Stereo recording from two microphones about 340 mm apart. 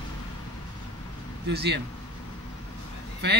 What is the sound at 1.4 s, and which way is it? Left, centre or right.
Speech, right.